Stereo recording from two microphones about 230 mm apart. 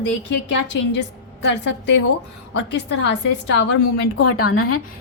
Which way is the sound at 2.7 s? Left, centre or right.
Left.